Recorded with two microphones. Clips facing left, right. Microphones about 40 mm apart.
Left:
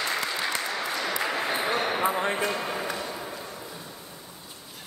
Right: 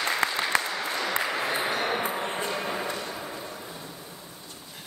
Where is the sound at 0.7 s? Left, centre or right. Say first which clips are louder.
Even; centre.